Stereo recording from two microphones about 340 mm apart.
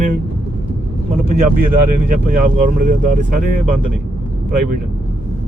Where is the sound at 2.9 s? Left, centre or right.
Right.